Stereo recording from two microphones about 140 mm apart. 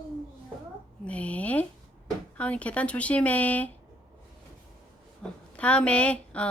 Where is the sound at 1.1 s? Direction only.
10° left (ahead or behind).